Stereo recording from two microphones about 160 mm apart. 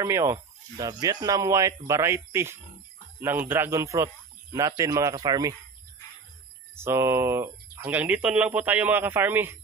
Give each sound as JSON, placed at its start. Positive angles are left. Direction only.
{"t": 0.0, "sound": "speech", "side_deg": -20}
{"t": 6.7, "sound": "speech", "side_deg": -15}